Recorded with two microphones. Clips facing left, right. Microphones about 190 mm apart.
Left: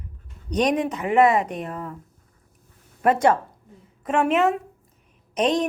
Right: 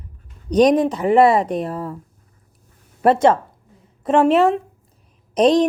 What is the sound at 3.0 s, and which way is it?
A woman's voice, 25° right (ahead or behind).